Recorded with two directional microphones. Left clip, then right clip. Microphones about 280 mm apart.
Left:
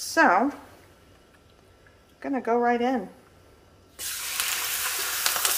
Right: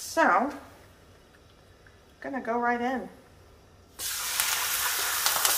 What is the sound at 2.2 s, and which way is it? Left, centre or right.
Speech, left.